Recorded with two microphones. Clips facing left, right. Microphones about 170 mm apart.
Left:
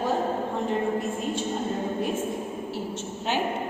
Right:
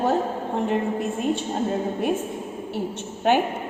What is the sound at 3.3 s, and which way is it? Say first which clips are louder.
Speech: right 9 dB; 55° right (ahead or behind).